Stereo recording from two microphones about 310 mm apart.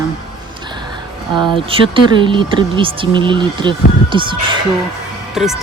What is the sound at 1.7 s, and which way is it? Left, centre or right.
Speech, centre.